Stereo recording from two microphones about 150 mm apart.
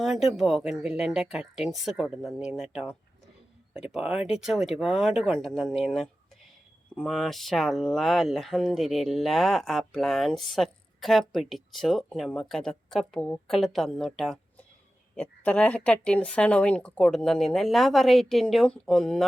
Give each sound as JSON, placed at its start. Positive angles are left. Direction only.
{"t": 0.0, "sound": "speech", "side_deg": 0}